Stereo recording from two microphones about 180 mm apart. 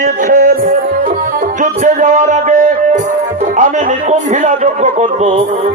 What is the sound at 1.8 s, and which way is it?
Music, 45° right (ahead or behind).